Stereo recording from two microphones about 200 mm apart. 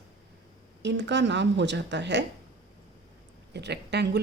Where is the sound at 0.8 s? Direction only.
60° right (ahead or behind).